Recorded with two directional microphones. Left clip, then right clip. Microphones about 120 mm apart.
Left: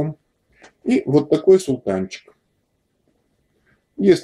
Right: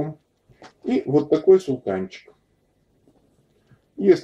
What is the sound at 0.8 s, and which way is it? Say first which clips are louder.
Speech: left 3 dB; 25° left (ahead or behind).